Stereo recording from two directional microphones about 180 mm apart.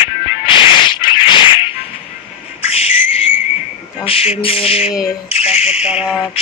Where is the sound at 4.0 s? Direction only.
30° left (ahead or behind).